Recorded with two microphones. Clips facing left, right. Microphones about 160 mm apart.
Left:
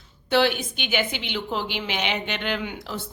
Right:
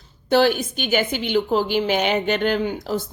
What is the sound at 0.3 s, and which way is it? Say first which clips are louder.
A woman's voice: right 4 dB; 45° right (ahead or behind).